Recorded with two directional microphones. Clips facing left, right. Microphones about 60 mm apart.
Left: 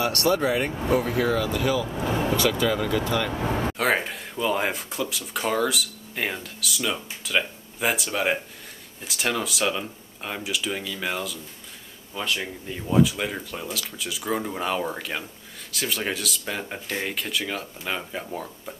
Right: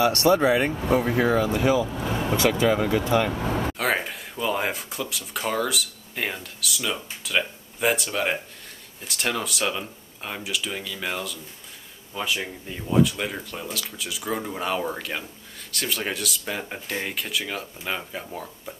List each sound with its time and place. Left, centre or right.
0.0 s speech: right
3.3 s speech: centre
3.7 s speech: centre